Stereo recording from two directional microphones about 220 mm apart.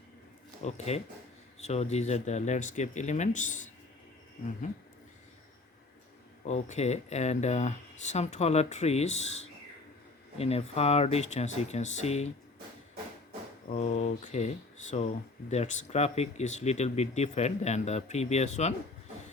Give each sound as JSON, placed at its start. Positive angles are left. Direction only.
{"t": 0.6, "sound": "speech", "side_deg": 30}
{"t": 6.4, "sound": "speech", "side_deg": 30}
{"t": 13.7, "sound": "speech", "side_deg": 35}